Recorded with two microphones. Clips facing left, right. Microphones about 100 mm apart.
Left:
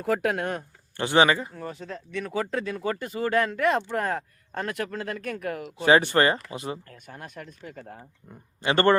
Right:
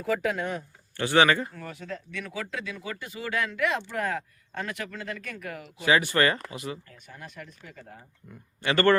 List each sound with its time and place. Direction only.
0.0 s speech: 55° left (ahead or behind)
0.9 s speech: 20° left (ahead or behind); by 5.6 s 50° left (ahead or behind)
5.8 s speech: 30° left (ahead or behind)
6.9 s speech: 50° left (ahead or behind)
8.3 s speech: 25° left (ahead or behind)